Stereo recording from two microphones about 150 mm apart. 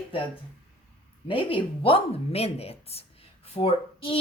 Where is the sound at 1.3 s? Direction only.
35° left (ahead or behind).